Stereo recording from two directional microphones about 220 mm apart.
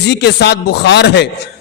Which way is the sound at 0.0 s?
50° left (ahead or behind).